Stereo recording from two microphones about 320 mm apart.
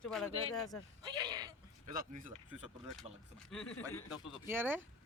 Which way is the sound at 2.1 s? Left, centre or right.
Right.